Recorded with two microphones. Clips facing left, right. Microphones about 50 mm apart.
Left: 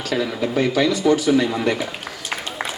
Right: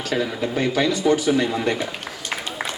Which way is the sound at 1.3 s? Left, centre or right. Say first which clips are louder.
Left 2 dB; centre.